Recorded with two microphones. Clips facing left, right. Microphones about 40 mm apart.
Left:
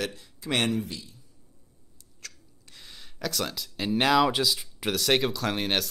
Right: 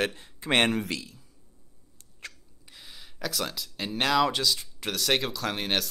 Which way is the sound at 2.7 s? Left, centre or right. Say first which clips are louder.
Even; centre.